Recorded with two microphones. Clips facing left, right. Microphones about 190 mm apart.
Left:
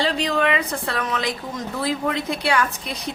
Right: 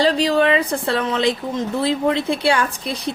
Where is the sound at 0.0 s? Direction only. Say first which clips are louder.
Right 5 dB; 35° right (ahead or behind).